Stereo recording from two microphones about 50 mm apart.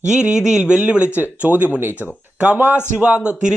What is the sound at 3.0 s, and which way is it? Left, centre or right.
Speech, right.